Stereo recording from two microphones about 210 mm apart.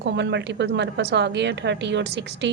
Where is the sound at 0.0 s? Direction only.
55° right (ahead or behind).